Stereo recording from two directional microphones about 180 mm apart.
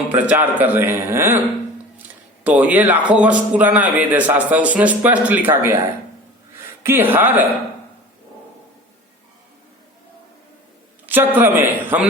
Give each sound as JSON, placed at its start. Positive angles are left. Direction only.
{"t": 0.1, "sound": "speech", "side_deg": -10}
{"t": 6.8, "sound": "speech", "side_deg": -10}
{"t": 11.0, "sound": "a sound", "side_deg": -10}
{"t": 11.3, "sound": "speech", "side_deg": -10}